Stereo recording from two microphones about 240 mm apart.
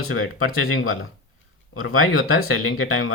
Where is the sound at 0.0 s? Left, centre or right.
Left.